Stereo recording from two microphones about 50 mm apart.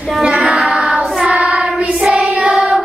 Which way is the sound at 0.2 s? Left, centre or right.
Centre.